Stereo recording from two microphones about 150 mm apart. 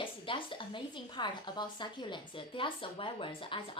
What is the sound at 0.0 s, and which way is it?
A woman's voice, 35° left (ahead or behind).